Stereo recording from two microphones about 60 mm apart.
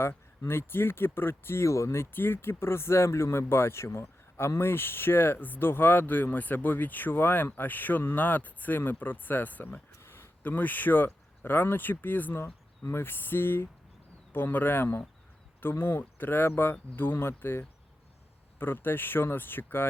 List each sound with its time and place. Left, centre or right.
0.0 s speech: left
10.0 s a sound: left
10.4 s speech: left